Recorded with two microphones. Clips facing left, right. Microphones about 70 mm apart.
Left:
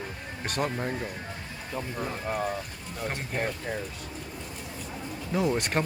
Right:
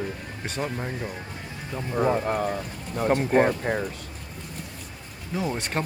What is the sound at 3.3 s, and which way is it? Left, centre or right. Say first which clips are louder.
Speech: right 10 dB; right.